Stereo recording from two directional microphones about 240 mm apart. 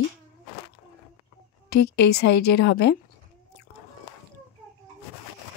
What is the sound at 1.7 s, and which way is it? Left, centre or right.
A woman's voice, left.